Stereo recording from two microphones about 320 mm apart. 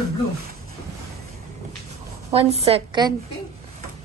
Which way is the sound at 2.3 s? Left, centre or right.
Centre.